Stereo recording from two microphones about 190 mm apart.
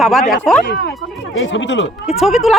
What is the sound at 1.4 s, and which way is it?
Speech, 70° left (ahead or behind).